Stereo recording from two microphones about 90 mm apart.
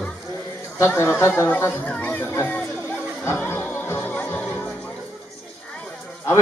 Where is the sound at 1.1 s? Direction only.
30° left (ahead or behind).